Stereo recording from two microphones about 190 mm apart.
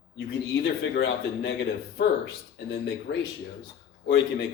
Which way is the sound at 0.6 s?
60° left (ahead or behind).